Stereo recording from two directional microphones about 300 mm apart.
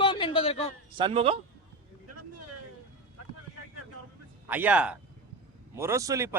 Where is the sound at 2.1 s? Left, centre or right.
Right.